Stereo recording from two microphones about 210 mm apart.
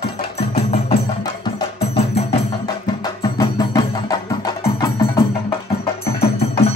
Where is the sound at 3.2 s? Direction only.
20° left (ahead or behind).